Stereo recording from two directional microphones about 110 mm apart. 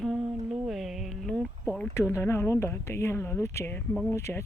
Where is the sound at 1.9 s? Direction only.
25° left (ahead or behind).